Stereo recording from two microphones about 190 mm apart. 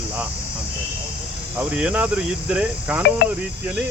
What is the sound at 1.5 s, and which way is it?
Speech, 5° right (ahead or behind).